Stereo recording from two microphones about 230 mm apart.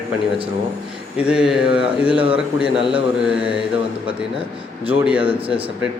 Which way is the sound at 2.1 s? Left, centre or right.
Right.